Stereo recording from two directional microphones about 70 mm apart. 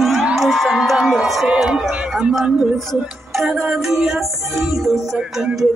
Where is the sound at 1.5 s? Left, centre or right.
Centre.